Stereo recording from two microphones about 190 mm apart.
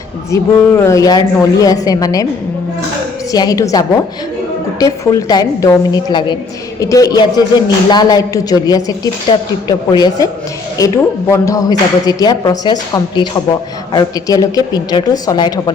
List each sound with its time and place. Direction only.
0.3 s speech: 15° left (ahead or behind)
3.3 s speech: 20° left (ahead or behind)